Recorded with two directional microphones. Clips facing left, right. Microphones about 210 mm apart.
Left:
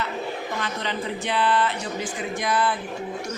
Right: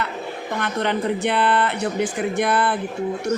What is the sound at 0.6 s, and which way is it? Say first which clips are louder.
A woman's voice: right 10 dB; 60° right (ahead or behind).